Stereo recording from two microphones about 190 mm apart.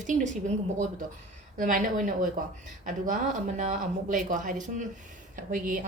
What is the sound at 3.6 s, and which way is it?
A woman's voice, 40° right (ahead or behind).